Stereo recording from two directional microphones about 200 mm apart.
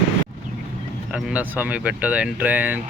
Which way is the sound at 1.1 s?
5° right (ahead or behind).